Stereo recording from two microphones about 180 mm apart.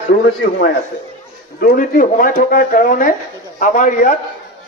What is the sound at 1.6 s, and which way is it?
A man's voice, 50° left (ahead or behind).